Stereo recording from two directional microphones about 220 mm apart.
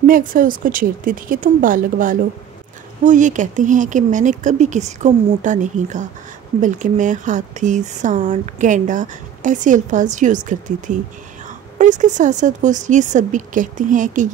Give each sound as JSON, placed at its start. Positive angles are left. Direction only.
{"t": 0.0, "sound": "speech", "side_deg": -40}